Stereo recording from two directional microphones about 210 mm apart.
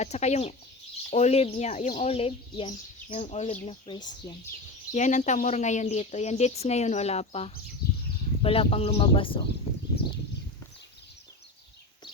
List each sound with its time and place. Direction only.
0.0 s speech: 30° left (ahead or behind)
4.9 s speech: 35° left (ahead or behind)